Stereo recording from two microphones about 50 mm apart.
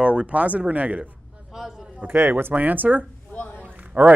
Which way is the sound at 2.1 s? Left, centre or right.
Right.